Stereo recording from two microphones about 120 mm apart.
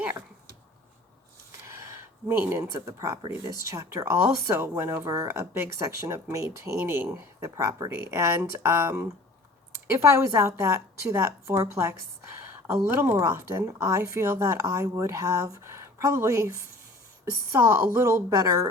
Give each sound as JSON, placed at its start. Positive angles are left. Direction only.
{"t": 1.6, "sound": "a sound", "side_deg": -25}
{"t": 2.7, "sound": "speech", "side_deg": -30}
{"t": 17.7, "sound": "speech", "side_deg": -25}